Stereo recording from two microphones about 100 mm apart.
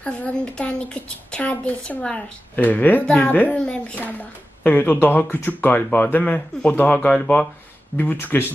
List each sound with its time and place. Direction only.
0.0 s a woman's voice: 10° left (ahead or behind)